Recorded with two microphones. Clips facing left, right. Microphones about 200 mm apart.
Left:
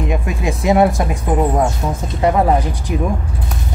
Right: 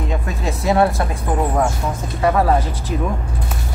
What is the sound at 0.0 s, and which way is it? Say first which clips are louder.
Speech: left 3 dB; 15° left (ahead or behind).